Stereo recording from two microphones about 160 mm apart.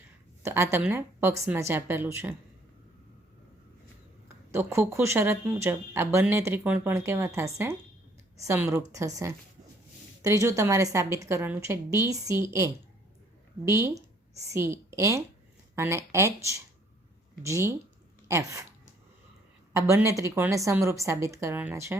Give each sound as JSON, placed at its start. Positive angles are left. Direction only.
{"t": 0.4, "sound": "speech", "side_deg": -15}
{"t": 4.5, "sound": "a woman's voice", "side_deg": -15}
{"t": 19.7, "sound": "speech", "side_deg": -20}